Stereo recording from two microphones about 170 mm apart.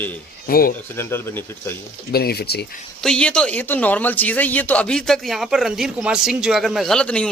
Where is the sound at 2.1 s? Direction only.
65° left (ahead or behind).